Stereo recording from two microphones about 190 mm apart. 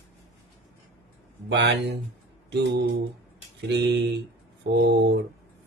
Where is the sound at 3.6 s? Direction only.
60° right (ahead or behind).